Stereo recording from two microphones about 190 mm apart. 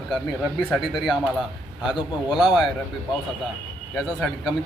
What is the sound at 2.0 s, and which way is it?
Speech, 25° left (ahead or behind).